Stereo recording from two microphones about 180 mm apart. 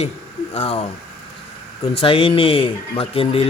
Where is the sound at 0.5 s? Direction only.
35° left (ahead or behind).